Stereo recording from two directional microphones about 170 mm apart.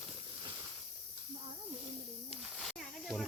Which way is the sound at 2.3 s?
Centre (ahead or behind).